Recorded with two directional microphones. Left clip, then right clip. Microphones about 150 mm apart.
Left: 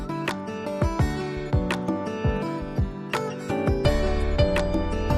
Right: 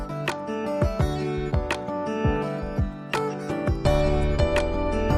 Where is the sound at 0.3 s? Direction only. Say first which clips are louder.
Right 6 dB; centre (ahead or behind).